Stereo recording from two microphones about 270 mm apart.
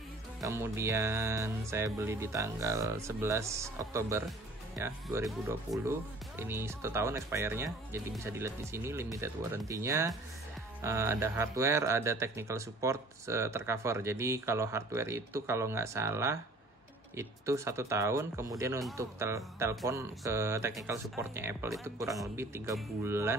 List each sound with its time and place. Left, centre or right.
0.4 s speech: centre